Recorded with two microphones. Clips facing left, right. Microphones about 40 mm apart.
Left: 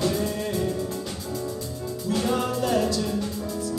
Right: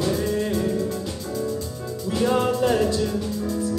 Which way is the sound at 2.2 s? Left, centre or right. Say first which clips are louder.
Right 6 dB; centre.